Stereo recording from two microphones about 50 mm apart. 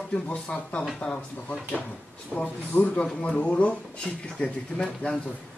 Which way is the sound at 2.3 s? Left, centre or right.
Left.